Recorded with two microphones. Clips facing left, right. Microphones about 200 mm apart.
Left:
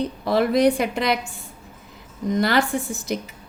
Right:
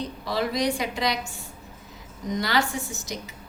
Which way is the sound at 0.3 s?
55° left (ahead or behind).